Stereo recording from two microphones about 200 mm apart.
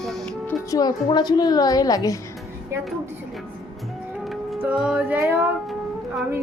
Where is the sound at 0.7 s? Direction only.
20° left (ahead or behind).